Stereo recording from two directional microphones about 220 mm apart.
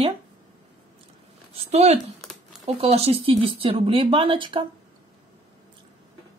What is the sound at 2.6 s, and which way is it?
Speech, 25° right (ahead or behind).